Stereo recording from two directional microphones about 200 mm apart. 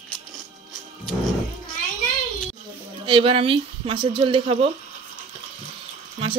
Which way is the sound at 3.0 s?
25° right (ahead or behind).